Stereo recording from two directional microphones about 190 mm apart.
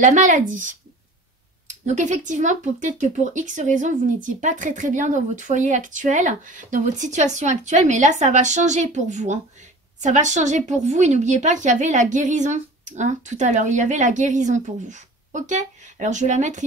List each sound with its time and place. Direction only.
0.0 s a woman's voice: 40° right (ahead or behind)